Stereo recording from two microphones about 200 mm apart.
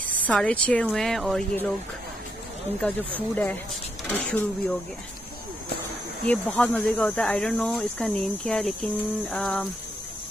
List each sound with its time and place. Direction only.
0.0 s speech: 5° left (ahead or behind)
4.1 s speech: 10° left (ahead or behind)
6.2 s speech: 5° left (ahead or behind)